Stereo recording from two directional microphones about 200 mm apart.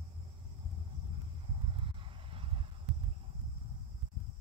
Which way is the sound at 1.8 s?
25° right (ahead or behind).